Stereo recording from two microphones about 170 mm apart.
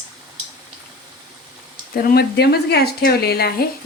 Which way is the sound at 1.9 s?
65° left (ahead or behind).